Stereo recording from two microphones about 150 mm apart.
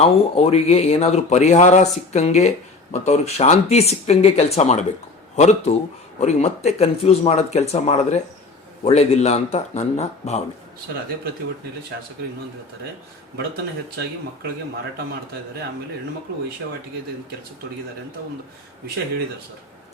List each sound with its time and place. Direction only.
0.0 s speech: 40° left (ahead or behind)